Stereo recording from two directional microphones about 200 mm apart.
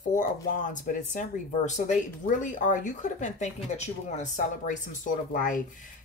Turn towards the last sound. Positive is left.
turn(degrees=40)  # may be behind; listen again after turning